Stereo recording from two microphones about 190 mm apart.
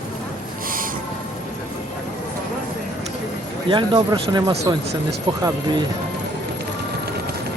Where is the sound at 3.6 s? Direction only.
25° right (ahead or behind).